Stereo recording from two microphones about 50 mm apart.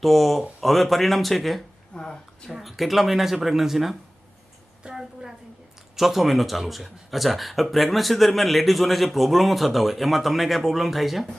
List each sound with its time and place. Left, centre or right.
0.0 s speech: centre
1.9 s a woman's voice: centre
2.5 s speech: centre
4.8 s a sound: centre
6.0 s speech: centre